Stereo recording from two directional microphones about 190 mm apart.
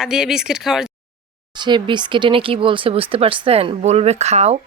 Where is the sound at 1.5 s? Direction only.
25° right (ahead or behind).